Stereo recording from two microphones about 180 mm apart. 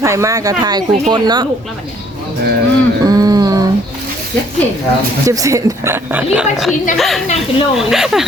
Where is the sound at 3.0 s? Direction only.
20° right (ahead or behind).